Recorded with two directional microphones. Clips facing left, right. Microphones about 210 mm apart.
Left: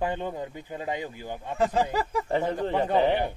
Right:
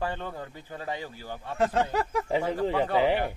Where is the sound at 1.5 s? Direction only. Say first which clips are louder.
Left 1 dB; centre (ahead or behind).